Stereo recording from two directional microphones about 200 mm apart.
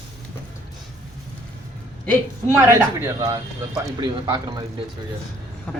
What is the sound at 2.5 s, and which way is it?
A man's voice, 10° right (ahead or behind).